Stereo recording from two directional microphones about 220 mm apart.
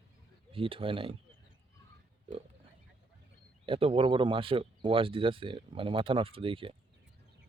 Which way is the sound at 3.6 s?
25° right (ahead or behind).